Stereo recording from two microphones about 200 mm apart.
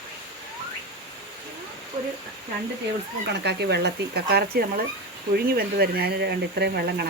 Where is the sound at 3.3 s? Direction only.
55° right (ahead or behind).